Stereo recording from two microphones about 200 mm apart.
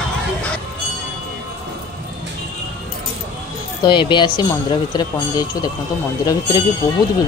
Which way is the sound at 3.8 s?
25° left (ahead or behind).